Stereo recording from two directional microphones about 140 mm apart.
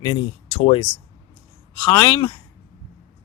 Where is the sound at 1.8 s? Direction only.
30° left (ahead or behind).